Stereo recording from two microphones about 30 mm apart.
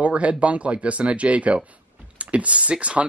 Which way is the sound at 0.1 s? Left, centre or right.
Right.